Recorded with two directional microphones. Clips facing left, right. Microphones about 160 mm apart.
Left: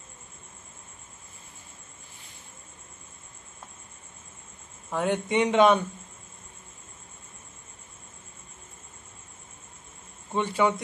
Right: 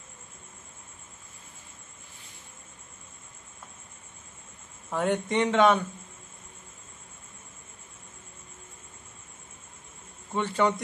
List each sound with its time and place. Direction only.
4.9 s a man's voice: centre (ahead or behind)
5.4 s a man's voice: 15° left (ahead or behind)
10.3 s a man's voice: 10° left (ahead or behind)